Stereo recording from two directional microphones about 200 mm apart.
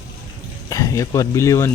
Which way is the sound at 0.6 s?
15° left (ahead or behind).